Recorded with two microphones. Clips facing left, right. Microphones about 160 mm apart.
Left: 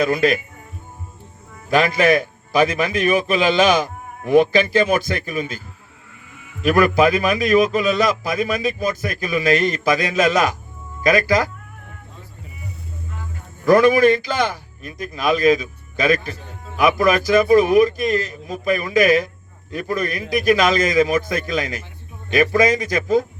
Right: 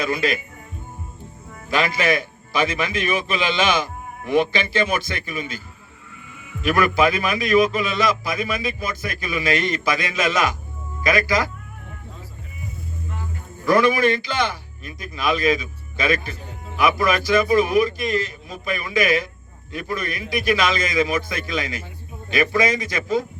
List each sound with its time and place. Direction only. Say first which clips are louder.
0.0 s speech: left 5 dB; 45° left (ahead or behind)
1.7 s a man's voice: left 5 dB; 40° left (ahead or behind)
6.6 s a man's voice: left 4 dB; 40° left (ahead or behind)
13.7 s a man's voice: left 5 dB; 40° left (ahead or behind)